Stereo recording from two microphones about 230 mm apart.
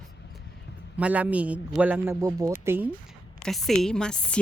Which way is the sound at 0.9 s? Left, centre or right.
Centre.